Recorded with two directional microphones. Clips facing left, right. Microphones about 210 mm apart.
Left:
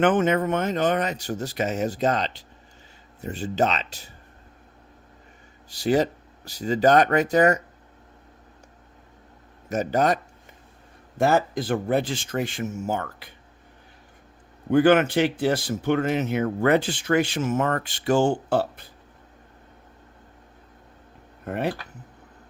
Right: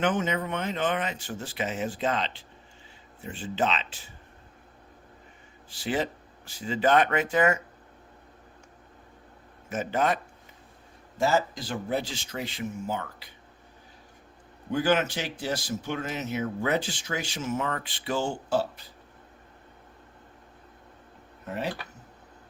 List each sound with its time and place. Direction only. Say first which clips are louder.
0.0 s speech: left 7 dB; 55° left (ahead or behind)
5.7 s speech: left 8 dB; 40° left (ahead or behind)
9.6 s speech: left 5 dB; 40° left (ahead or behind)
11.2 s speech: left 4 dB; 55° left (ahead or behind)
14.7 s speech: left 8 dB; 60° left (ahead or behind)
21.4 s speech: left 6 dB; 55° left (ahead or behind)